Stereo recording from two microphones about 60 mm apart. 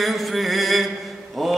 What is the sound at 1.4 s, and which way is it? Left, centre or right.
Mantra, centre.